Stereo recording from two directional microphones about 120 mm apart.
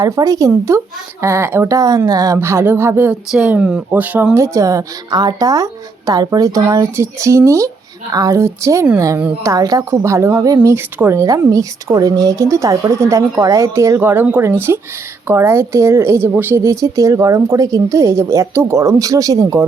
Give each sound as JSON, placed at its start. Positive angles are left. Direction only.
{"t": 0.0, "sound": "a woman's voice", "side_deg": -30}
{"t": 3.1, "sound": "speech", "side_deg": -10}
{"t": 4.4, "sound": "a woman's voice", "side_deg": -25}